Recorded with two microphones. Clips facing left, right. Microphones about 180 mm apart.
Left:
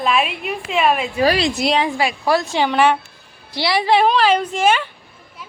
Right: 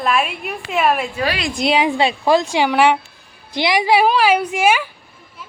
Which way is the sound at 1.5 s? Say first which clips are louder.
Right 1 dB; centre (ahead or behind).